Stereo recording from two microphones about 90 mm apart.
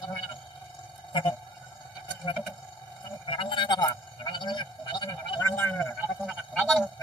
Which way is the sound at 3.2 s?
70° left (ahead or behind).